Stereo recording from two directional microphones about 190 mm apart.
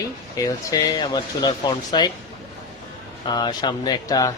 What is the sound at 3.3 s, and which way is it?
Speech, 20° left (ahead or behind).